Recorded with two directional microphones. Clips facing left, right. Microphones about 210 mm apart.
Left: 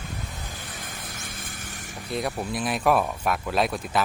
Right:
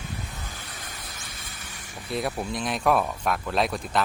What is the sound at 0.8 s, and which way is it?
Vehicle, 50° left (ahead or behind).